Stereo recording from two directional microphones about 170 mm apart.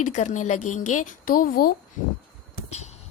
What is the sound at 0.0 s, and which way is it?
Speech, 45° left (ahead or behind).